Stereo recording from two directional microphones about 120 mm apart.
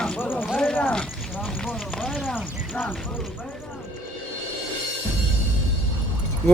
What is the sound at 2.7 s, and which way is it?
Speech, 15° left (ahead or behind).